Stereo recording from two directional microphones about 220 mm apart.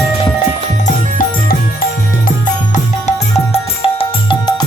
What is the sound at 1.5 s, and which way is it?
Music, 40° left (ahead or behind).